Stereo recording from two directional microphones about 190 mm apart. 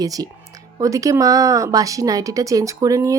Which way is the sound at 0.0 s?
20° right (ahead or behind).